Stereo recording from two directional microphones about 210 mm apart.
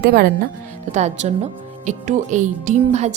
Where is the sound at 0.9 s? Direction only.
35° right (ahead or behind).